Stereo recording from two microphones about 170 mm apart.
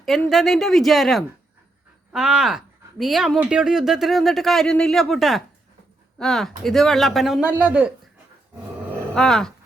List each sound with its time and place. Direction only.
0.3 s speech: centre (ahead or behind)
9.1 s speech: 5° left (ahead or behind)